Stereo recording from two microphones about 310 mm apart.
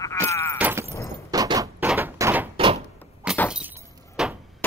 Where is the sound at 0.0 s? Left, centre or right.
Centre.